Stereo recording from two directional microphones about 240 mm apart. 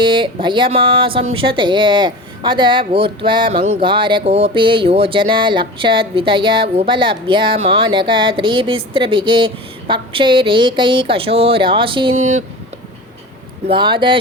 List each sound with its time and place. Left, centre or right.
0.0 s speech: centre
13.7 s speech: centre